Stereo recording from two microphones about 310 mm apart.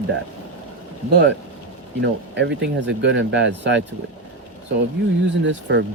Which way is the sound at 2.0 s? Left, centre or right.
Right.